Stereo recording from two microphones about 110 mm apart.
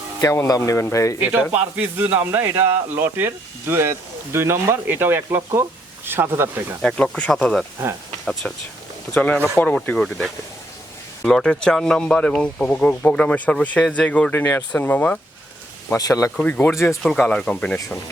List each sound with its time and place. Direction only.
0.2 s speech: 30° left (ahead or behind)
1.2 s speech: 15° right (ahead or behind)
6.8 s speech: 5° left (ahead or behind)
16.0 s speech: 30° left (ahead or behind)
16.4 s speech: 10° left (ahead or behind)
16.7 s speech: 25° left (ahead or behind)
17.0 s speech: 5° left (ahead or behind)